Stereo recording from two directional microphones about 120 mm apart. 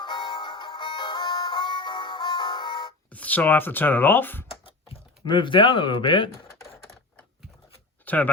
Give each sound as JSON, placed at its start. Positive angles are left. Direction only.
{"t": 0.0, "sound": "music", "side_deg": 40}
{"t": 3.1, "sound": "speech", "side_deg": 15}
{"t": 5.2, "sound": "speech", "side_deg": 40}
{"t": 6.5, "sound": "typing", "side_deg": 25}
{"t": 8.0, "sound": "speech", "side_deg": 15}